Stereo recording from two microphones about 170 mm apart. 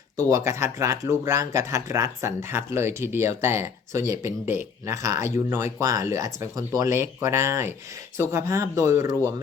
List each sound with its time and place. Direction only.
0.2 s speech: 20° right (ahead or behind)